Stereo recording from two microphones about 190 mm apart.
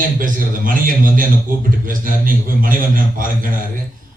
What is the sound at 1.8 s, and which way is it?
A man's voice, 45° right (ahead or behind).